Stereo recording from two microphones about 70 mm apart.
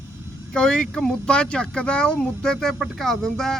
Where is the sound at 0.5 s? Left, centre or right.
Centre.